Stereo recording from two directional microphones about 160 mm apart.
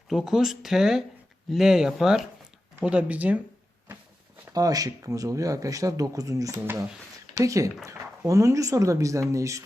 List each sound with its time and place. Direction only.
0.1 s speech: centre (ahead or behind)
4.5 s speech: 20° right (ahead or behind)